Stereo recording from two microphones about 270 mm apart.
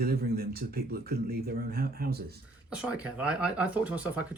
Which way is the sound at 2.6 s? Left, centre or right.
Centre.